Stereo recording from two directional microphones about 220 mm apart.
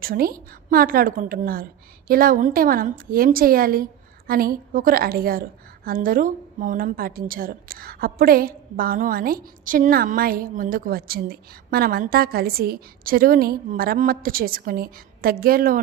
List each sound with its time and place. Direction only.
0.0 s a woman's voice: 40° right (ahead or behind)